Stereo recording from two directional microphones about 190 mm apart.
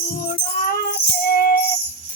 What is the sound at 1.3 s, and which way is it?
Music, 50° left (ahead or behind).